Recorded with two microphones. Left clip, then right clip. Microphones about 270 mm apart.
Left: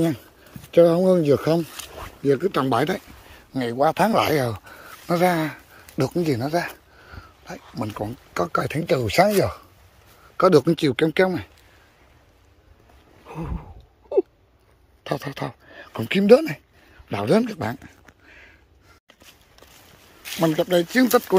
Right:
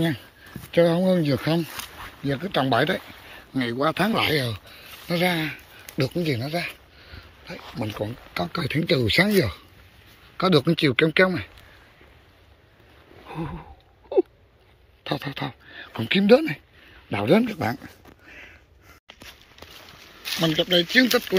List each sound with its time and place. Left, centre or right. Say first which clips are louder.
0.7 s speech: left 4 dB; centre
13.3 s a sound: right 1 dB; centre
15.0 s speech: left 1 dB; centre
20.2 s speech: left 1 dB; centre